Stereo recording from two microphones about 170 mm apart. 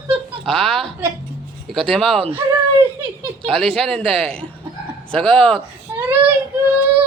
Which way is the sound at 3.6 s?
5° left (ahead or behind).